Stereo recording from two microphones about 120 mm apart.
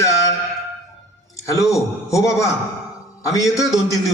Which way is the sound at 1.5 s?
25° left (ahead or behind).